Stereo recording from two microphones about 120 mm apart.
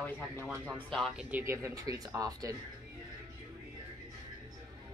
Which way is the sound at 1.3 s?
20° right (ahead or behind).